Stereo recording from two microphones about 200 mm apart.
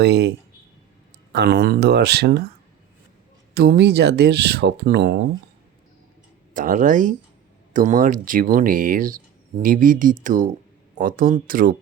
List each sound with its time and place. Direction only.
0.0 s speech: 55° right (ahead or behind)
3.5 s speech: 55° right (ahead or behind)
6.5 s speech: 40° right (ahead or behind)